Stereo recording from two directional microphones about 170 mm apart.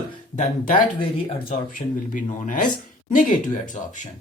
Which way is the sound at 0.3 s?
50° left (ahead or behind).